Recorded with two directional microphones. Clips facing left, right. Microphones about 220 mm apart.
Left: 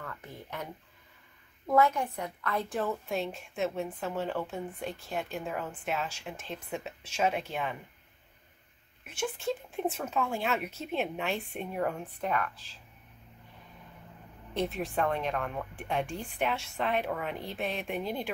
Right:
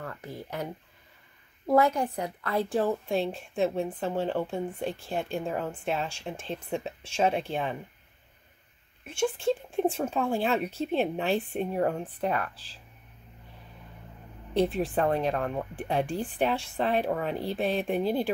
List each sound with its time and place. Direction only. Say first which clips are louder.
0.0 s a sound: right 5 dB; 35° right (ahead or behind)
1.7 s a woman's voice: right 3 dB; 35° right (ahead or behind)
9.0 s a woman's voice: right 6 dB; 30° right (ahead or behind)
14.5 s a woman's voice: right 6 dB; 30° right (ahead or behind)